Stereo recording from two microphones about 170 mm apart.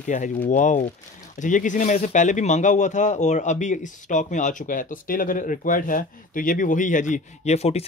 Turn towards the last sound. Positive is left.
turn(degrees=35)  # may be behind; listen again after turning